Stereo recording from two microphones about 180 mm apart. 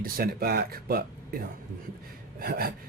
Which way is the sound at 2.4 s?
60° right (ahead or behind).